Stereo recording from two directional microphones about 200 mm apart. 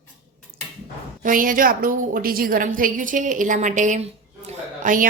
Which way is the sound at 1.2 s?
45° right (ahead or behind).